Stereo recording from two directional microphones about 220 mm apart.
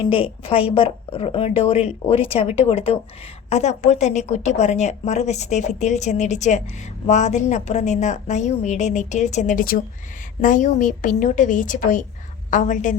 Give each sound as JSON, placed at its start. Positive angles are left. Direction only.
{"t": 0.1, "sound": "a woman's voice", "side_deg": 25}